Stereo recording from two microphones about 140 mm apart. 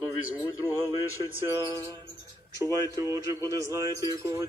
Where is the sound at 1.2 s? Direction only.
20° right (ahead or behind).